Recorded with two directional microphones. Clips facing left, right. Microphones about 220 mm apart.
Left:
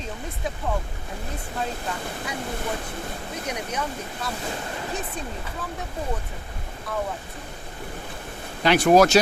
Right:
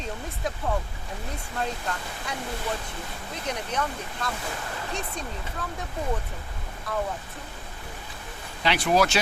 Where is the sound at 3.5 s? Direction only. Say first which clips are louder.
Right 1 dB; 10° left (ahead or behind).